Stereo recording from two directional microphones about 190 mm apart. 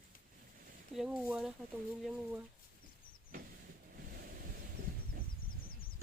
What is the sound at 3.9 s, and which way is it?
Waves, 50° right (ahead or behind).